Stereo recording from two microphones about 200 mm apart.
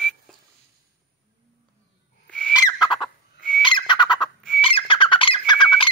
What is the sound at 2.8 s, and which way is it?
Fowl, 25° left (ahead or behind).